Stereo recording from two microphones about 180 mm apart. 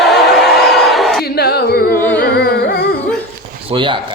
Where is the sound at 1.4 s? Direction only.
60° left (ahead or behind).